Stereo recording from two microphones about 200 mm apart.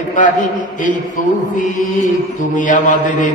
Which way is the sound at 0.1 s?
40° left (ahead or behind).